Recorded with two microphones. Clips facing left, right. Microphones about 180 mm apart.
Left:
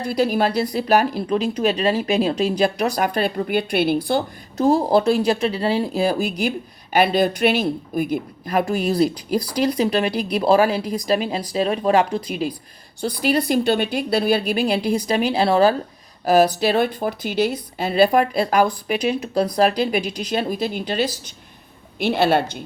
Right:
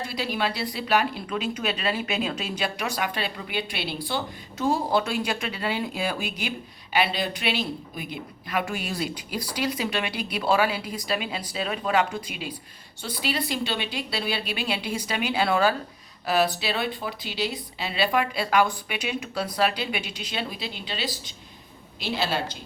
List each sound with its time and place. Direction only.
0.0 s a woman's voice: 45° left (ahead or behind)
4.5 s a woman's voice: 40° left (ahead or behind); by 22.4 s 60° left (ahead or behind)